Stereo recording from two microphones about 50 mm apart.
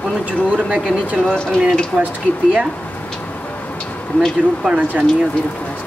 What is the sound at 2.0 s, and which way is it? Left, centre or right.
Speech, right.